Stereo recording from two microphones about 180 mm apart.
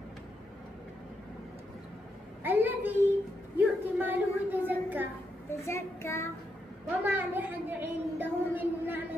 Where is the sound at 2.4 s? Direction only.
10° right (ahead or behind).